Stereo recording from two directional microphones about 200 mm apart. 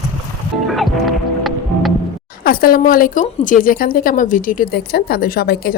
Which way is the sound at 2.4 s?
45° left (ahead or behind).